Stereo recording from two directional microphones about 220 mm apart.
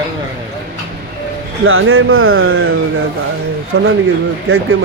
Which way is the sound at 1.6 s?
70° right (ahead or behind).